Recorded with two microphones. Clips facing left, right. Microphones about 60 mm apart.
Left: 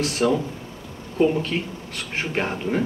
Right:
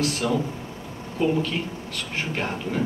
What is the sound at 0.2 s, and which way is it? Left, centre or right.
A man's voice, left.